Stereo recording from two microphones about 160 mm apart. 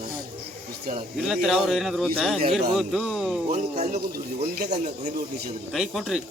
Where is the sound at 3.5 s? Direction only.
50° right (ahead or behind).